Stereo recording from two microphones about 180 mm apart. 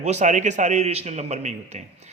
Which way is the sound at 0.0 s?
40° right (ahead or behind).